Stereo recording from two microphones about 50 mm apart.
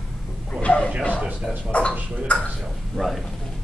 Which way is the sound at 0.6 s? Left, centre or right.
Left.